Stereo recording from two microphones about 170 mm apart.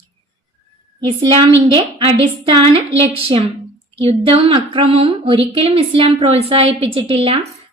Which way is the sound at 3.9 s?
35° right (ahead or behind).